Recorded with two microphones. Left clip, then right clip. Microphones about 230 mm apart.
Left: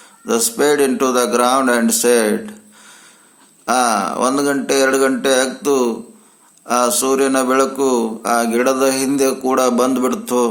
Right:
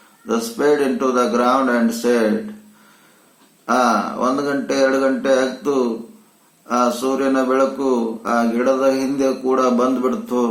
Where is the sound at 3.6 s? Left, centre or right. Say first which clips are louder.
Left 1 dB; left.